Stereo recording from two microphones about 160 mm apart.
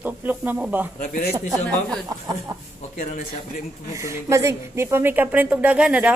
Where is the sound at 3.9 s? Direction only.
20° right (ahead or behind).